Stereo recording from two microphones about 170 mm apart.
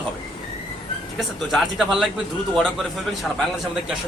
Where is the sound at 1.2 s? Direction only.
Centre (ahead or behind).